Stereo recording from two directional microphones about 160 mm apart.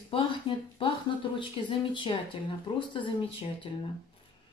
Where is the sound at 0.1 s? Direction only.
35° left (ahead or behind).